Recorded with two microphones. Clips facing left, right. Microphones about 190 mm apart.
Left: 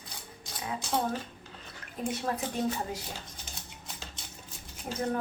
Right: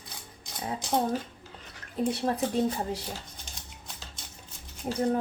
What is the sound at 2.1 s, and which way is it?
Speech, 30° right (ahead or behind).